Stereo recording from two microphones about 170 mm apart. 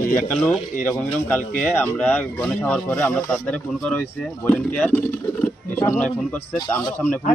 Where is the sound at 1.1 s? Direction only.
10° left (ahead or behind).